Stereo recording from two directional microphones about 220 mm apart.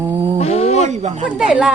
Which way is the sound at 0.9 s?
30° right (ahead or behind).